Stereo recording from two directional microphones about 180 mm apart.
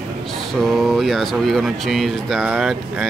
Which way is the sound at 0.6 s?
Centre (ahead or behind).